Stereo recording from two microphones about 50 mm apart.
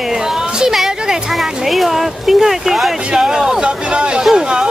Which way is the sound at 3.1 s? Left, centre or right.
Centre.